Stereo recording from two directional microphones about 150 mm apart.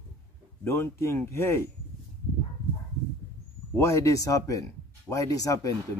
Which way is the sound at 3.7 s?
15° left (ahead or behind).